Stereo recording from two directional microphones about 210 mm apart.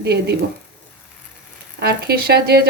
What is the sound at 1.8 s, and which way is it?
Speech, 50° right (ahead or behind).